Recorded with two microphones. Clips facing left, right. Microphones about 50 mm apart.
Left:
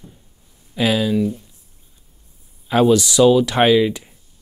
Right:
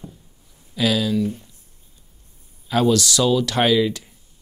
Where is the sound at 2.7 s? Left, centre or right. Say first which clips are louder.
Left 4 dB; left.